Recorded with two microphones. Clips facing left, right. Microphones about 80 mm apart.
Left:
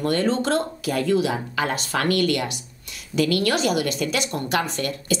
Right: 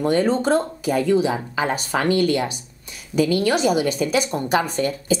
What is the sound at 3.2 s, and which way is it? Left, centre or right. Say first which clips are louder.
Speech: right 2 dB; centre.